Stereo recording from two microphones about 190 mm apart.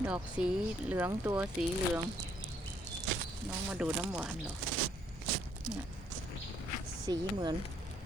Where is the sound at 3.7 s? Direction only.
5° right (ahead or behind).